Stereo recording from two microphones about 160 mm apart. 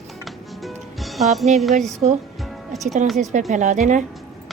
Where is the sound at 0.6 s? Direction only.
Centre (ahead or behind).